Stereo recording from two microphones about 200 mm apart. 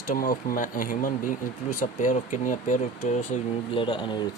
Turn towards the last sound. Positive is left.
turn(degrees=25)  # may be behind; listen again after turning